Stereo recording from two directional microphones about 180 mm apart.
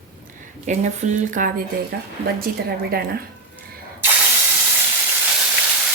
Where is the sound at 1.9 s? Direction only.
60° right (ahead or behind).